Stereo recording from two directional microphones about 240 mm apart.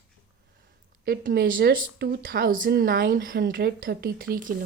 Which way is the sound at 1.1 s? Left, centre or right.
Right.